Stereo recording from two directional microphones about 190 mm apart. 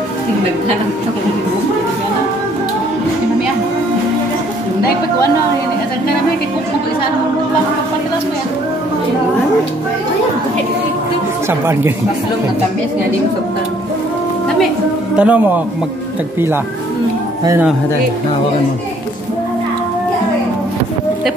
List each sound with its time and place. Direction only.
15.1 s a man's voice: 10° right (ahead or behind)
17.5 s a man's voice: 10° right (ahead or behind)